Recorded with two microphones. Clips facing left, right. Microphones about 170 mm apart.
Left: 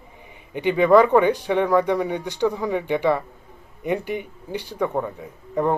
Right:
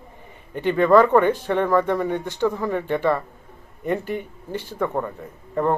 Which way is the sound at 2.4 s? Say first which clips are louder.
Left 1 dB; 15° left (ahead or behind).